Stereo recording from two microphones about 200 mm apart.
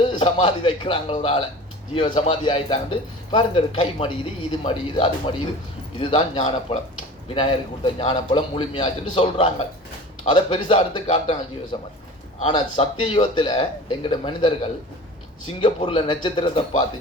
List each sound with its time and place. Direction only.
0.0 s speech: 25° left (ahead or behind)
7.9 s speech: 25° left (ahead or behind)
15.6 s speech: 25° left (ahead or behind)